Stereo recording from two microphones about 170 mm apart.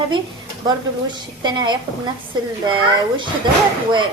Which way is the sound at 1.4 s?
25° right (ahead or behind).